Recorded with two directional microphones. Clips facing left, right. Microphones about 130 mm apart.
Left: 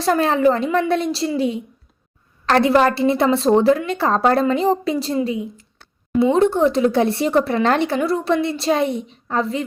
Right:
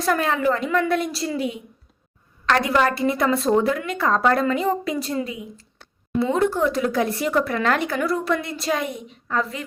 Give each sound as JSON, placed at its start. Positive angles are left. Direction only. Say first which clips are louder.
{"t": 0.0, "sound": "speech", "louder": "left 5 dB", "side_deg": 30}